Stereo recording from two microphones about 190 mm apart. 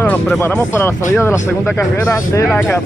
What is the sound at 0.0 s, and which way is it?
Speech, 10° left (ahead or behind).